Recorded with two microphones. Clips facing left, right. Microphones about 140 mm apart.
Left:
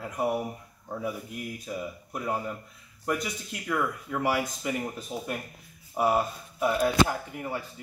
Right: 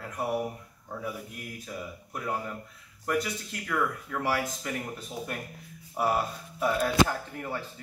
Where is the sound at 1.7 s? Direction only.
10° left (ahead or behind).